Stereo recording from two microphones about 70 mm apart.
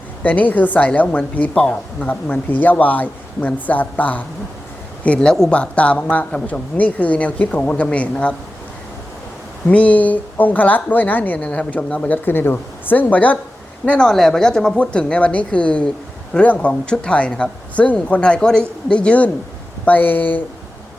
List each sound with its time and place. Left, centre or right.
0.2 s speech: left
9.6 s speech: left